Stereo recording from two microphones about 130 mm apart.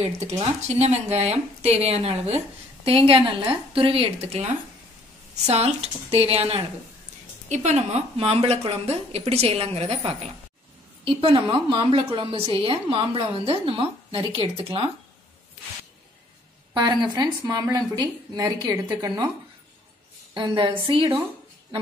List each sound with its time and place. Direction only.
0.3 s speech: 60° right (ahead or behind)
5.5 s speech: 55° right (ahead or behind)
7.4 s speech: 65° right (ahead or behind)
11.1 s speech: 40° right (ahead or behind)
16.7 s a woman's voice: 35° right (ahead or behind)
20.3 s a woman's voice: 35° right (ahead or behind)